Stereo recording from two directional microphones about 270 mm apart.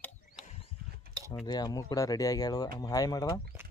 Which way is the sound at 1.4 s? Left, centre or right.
Centre.